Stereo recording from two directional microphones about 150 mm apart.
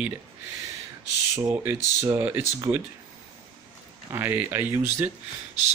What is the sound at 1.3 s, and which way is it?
Speech, 20° right (ahead or behind).